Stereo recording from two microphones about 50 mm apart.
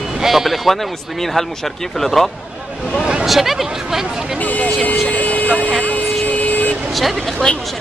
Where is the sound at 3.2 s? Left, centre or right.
Centre.